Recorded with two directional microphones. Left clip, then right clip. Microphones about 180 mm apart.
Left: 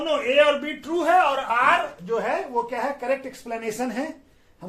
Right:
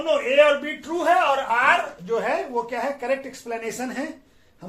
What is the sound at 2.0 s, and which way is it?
Speech, 10° left (ahead or behind).